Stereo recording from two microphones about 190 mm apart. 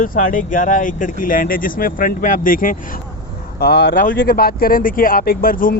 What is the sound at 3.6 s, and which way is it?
Speech, 60° left (ahead or behind).